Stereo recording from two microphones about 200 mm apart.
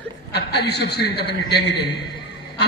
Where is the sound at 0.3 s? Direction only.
55° left (ahead or behind).